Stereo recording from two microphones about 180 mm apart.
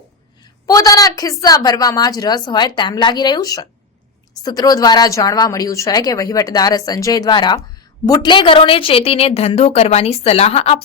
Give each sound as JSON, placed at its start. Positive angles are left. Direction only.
{"t": 0.7, "sound": "a woman's voice", "side_deg": 20}